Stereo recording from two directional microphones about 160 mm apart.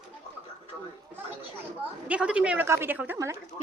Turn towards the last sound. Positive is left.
turn(degrees=-15)  # may be behind; listen again after turning